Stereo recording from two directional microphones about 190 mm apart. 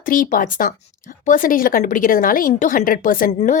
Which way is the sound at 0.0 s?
45° left (ahead or behind).